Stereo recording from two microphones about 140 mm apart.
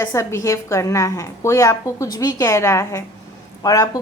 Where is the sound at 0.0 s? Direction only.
20° left (ahead or behind).